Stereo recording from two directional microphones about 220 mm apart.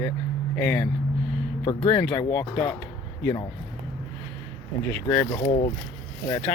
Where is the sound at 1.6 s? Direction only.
20° left (ahead or behind).